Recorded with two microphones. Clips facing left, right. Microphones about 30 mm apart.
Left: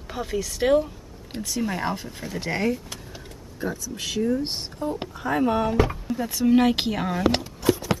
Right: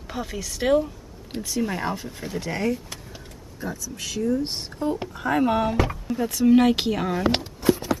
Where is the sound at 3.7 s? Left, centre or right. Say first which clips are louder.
Left 2 dB; left.